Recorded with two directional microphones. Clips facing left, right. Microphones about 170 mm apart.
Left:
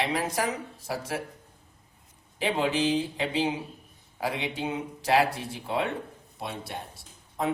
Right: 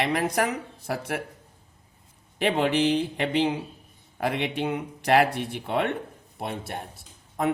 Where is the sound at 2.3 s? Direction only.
65° right (ahead or behind).